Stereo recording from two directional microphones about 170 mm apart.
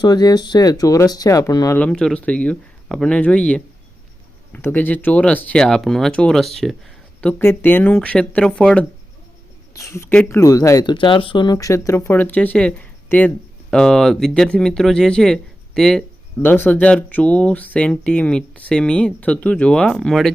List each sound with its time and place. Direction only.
0.0 s speech: 25° left (ahead or behind)
1.8 s speech: 5° left (ahead or behind)
9.7 s speech: 15° left (ahead or behind)